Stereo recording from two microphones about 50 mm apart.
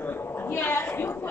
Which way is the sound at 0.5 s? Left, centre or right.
Left.